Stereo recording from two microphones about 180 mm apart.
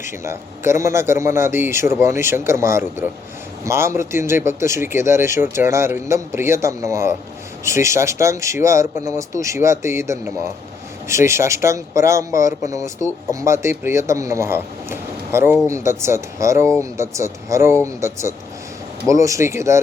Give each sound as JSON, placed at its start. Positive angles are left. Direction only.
{"t": 0.0, "sound": "speech", "side_deg": -15}